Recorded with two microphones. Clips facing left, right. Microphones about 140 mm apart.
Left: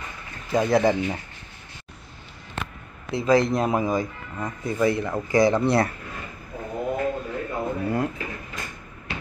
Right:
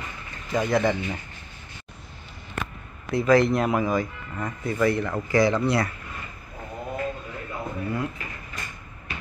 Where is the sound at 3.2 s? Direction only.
35° left (ahead or behind).